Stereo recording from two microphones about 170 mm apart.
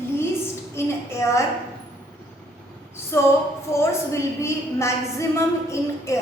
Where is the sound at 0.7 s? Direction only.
15° left (ahead or behind).